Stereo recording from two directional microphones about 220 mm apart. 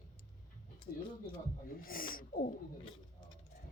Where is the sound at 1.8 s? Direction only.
40° left (ahead or behind).